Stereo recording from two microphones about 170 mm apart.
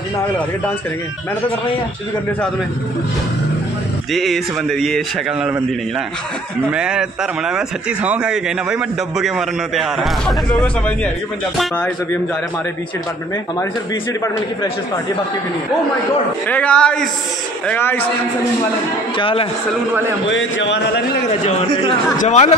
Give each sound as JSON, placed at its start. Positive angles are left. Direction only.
{"t": 4.1, "sound": "speech", "side_deg": 0}
{"t": 6.7, "sound": "speech", "side_deg": -5}
{"t": 11.5, "sound": "a man's voice", "side_deg": 10}
{"t": 16.4, "sound": "a man's voice", "side_deg": 10}
{"t": 19.1, "sound": "a man's voice", "side_deg": 30}
{"t": 20.2, "sound": "a man's voice", "side_deg": 90}
{"t": 21.3, "sound": "a man's voice", "side_deg": 40}